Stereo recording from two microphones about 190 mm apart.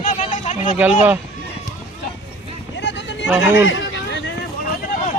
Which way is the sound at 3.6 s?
75° left (ahead or behind).